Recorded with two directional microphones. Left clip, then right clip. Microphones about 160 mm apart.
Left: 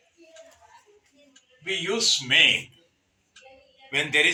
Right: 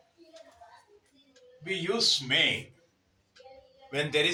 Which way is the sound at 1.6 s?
25° right (ahead or behind).